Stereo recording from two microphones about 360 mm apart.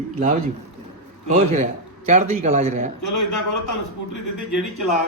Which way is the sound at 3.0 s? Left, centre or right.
Left.